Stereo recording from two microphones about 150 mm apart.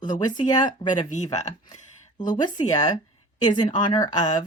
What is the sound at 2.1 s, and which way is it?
Speech, 30° left (ahead or behind).